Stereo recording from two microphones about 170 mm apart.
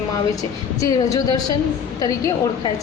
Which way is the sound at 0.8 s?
20° left (ahead or behind).